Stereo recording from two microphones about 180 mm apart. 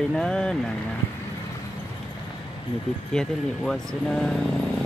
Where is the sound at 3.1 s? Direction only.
5° left (ahead or behind).